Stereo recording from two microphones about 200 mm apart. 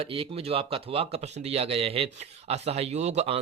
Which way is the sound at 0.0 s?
30° right (ahead or behind).